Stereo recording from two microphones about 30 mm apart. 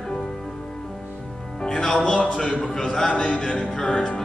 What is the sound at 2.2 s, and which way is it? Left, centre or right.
Music, left.